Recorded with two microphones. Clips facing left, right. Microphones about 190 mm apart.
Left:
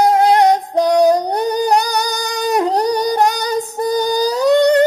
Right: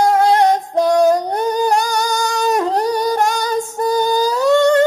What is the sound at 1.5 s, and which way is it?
Female singing, 40° left (ahead or behind).